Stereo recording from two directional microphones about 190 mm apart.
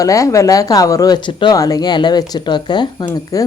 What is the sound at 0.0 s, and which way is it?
Speech, 15° left (ahead or behind).